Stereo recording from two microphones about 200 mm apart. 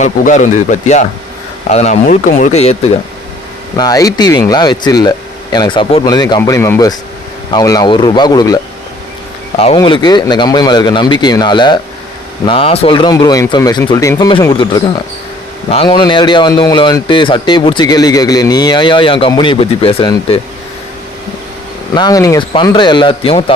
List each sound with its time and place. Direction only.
0.0 s speech: 40° left (ahead or behind)
3.8 s a man's voice: 20° left (ahead or behind)
9.7 s a man's voice: 20° left (ahead or behind)
21.9 s a man's voice: 20° left (ahead or behind)